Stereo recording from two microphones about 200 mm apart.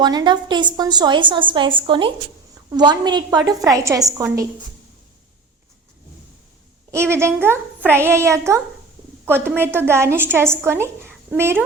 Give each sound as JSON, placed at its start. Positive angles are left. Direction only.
{"t": 0.0, "sound": "a woman's voice", "side_deg": -20}
{"t": 6.9, "sound": "a woman's voice", "side_deg": -15}